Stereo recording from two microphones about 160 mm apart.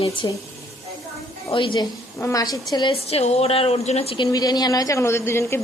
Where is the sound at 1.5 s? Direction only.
30° left (ahead or behind).